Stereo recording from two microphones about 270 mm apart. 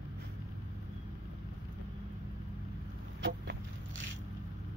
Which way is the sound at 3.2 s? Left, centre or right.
Right.